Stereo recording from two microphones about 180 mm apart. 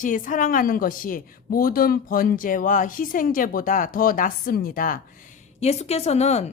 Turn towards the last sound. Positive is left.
turn(degrees=35)  # may be behind; listen again after turning